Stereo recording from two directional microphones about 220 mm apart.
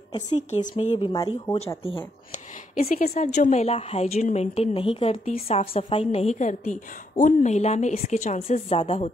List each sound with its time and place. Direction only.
0.1 s a woman's voice: 25° left (ahead or behind)
2.7 s a woman's voice: 35° left (ahead or behind)